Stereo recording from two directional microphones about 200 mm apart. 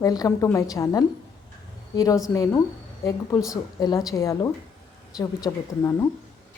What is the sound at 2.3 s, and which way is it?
A woman's voice, 15° left (ahead or behind).